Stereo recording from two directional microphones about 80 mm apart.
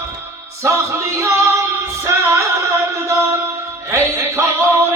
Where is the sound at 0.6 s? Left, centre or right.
Right.